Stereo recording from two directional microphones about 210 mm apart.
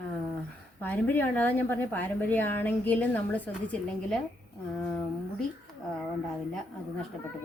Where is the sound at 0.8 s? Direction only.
10° left (ahead or behind).